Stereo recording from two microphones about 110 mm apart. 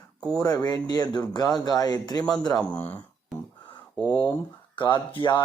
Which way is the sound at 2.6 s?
15° left (ahead or behind).